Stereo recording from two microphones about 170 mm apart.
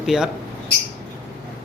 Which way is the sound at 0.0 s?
5° right (ahead or behind).